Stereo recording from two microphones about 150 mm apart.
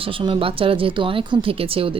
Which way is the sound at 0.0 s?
35° right (ahead or behind).